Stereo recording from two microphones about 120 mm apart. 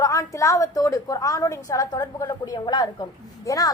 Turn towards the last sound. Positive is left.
turn(degrees=30)  # may be behind; listen again after turning